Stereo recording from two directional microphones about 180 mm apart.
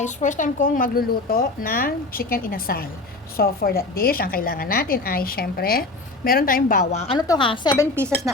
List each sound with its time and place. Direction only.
0.0 s a woman's voice: 45° left (ahead or behind)
7.2 s a woman's voice: 25° left (ahead or behind)
7.9 s speech: 5° left (ahead or behind)